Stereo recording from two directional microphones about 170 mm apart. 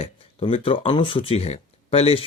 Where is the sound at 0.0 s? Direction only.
35° left (ahead or behind).